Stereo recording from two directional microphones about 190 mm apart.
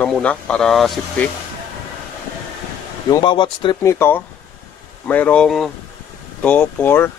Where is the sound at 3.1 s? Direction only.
25° left (ahead or behind).